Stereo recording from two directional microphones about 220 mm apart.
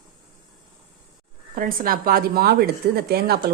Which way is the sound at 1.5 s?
40° right (ahead or behind).